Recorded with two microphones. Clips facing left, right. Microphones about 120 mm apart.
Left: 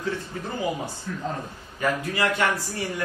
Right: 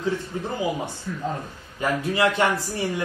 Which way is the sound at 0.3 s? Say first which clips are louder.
Right 4 dB; 15° right (ahead or behind).